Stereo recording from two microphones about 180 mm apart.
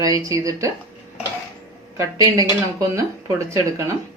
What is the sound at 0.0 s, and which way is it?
Speech, 20° right (ahead or behind).